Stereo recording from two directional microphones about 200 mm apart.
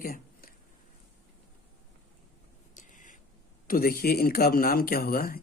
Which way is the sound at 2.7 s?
40° left (ahead or behind).